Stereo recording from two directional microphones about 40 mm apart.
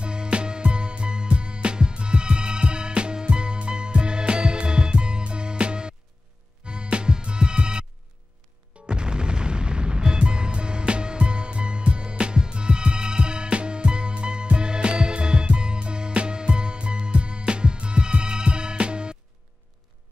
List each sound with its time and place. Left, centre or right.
0.0 s music: right
8.8 s music: right